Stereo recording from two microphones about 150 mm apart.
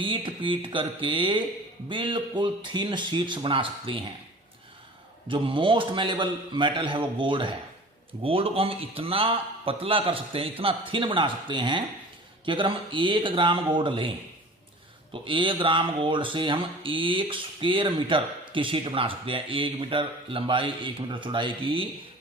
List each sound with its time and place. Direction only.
0.0 s speech: 35° right (ahead or behind)
5.3 s speech: 35° right (ahead or behind)
15.1 s speech: 35° right (ahead or behind)